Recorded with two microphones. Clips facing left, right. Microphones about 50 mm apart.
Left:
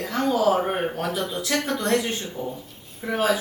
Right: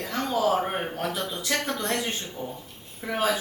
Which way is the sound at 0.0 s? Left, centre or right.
Centre.